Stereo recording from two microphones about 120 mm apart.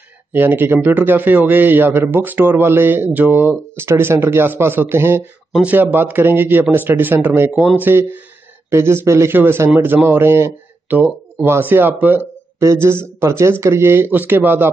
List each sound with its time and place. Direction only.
0.3 s speech: 15° right (ahead or behind)